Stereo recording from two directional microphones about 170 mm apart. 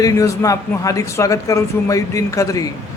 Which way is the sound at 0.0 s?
20° left (ahead or behind).